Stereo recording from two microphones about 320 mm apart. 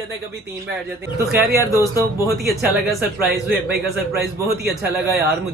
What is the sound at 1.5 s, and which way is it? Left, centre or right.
Speech, centre.